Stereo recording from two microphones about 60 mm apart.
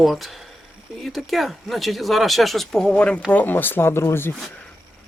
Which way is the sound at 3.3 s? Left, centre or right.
Left.